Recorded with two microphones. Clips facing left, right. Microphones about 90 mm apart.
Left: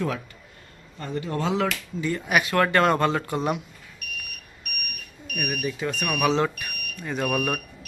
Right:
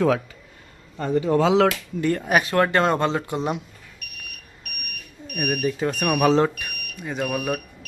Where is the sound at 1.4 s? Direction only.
90° right.